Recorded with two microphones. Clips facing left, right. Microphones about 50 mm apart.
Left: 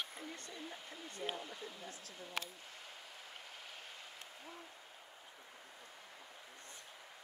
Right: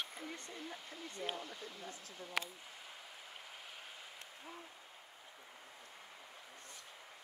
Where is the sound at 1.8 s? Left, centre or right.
Right.